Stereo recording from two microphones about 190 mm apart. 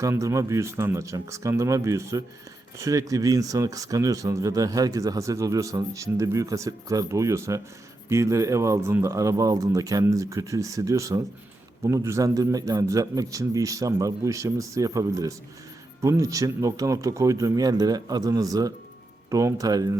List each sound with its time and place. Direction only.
0.0 s speech: 15° right (ahead or behind)